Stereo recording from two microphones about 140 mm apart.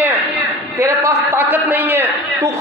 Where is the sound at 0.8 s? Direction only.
20° right (ahead or behind).